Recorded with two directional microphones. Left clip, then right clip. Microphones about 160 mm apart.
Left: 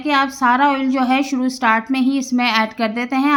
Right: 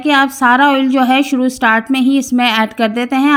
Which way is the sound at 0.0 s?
30° right (ahead or behind).